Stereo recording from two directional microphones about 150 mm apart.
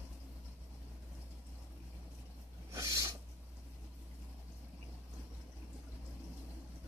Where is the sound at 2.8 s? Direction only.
20° right (ahead or behind).